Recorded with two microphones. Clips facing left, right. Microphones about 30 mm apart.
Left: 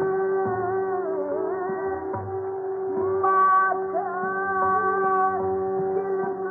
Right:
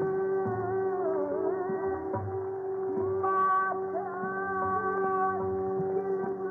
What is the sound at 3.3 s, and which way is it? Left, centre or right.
Music, centre.